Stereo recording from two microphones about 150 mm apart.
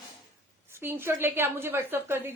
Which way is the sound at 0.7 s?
15° right (ahead or behind).